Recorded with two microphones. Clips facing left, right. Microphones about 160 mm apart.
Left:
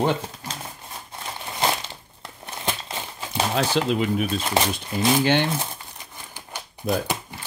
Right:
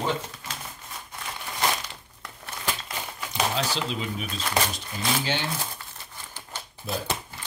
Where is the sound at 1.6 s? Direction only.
25° left (ahead or behind).